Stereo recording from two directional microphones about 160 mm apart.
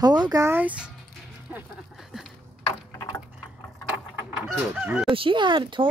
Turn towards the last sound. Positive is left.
turn(degrees=-30)  # may be behind; listen again after turning